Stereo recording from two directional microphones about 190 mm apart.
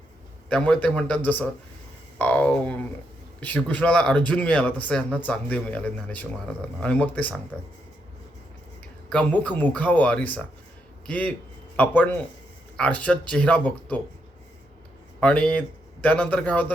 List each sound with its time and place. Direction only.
0.5 s speech: 5° left (ahead or behind)
9.0 s a man's voice: 5° left (ahead or behind)
15.2 s a man's voice: 5° left (ahead or behind)